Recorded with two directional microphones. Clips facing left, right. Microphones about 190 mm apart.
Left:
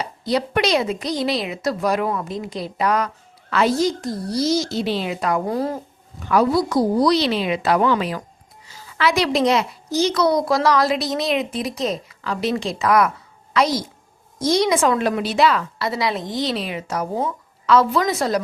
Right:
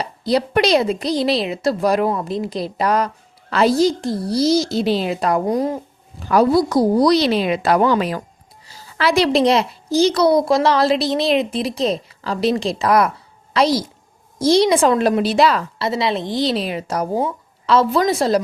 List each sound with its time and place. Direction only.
0.0 s a woman's voice: 35° right (ahead or behind)
5.5 s speech: 15° right (ahead or behind)
6.1 s a woman's voice: 35° right (ahead or behind)
8.6 s a woman's voice: 35° right (ahead or behind)
15.8 s a woman's voice: 25° right (ahead or behind)